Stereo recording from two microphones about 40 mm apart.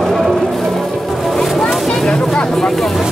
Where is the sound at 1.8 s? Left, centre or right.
Centre.